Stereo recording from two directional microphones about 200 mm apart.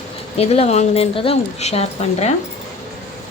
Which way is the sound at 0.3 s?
30° left (ahead or behind).